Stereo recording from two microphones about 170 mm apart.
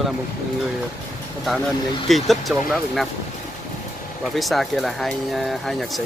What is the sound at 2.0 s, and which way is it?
Speech, centre (ahead or behind).